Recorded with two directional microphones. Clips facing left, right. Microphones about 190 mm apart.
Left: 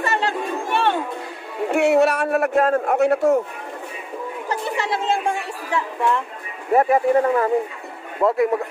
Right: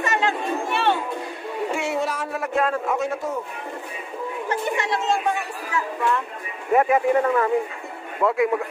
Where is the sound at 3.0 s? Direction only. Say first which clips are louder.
Left 9 dB; 70° left (ahead or behind).